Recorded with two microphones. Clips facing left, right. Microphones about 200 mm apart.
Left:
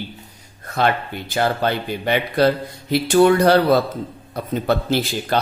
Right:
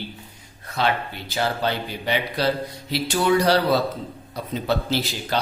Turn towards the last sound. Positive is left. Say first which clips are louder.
# left 5 dB
turn(degrees=55)  # may be behind; listen again after turning